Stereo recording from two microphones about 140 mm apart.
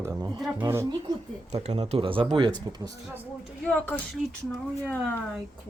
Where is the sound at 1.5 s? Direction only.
50° right (ahead or behind); by 2.9 s 30° right (ahead or behind).